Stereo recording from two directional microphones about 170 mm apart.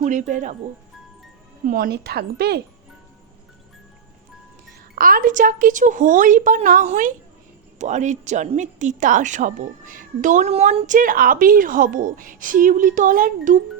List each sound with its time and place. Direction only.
0.0 s speech: 45° right (ahead or behind)
1.6 s a woman's voice: 55° right (ahead or behind)
4.9 s speech: 55° right (ahead or behind)